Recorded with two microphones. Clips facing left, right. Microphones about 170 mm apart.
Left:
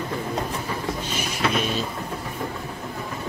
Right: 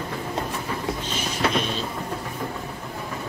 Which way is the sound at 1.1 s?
5° left (ahead or behind).